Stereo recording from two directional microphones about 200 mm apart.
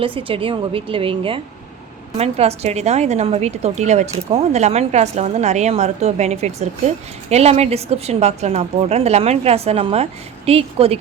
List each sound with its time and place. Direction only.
0.0 s a woman's voice: 25° right (ahead or behind)